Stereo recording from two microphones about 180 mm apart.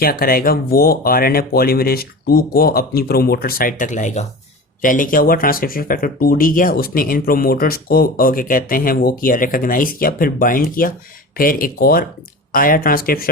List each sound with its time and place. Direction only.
0.0 s speech: 55° left (ahead or behind)